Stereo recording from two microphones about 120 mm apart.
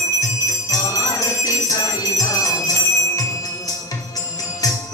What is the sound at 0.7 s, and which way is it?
Jingle bell, 30° left (ahead or behind).